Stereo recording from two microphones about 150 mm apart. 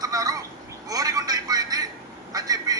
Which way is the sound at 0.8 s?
25° right (ahead or behind).